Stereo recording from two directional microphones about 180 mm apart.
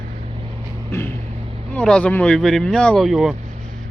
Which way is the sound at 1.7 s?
5° left (ahead or behind).